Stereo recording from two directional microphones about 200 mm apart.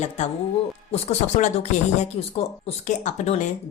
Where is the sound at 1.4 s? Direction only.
40° left (ahead or behind).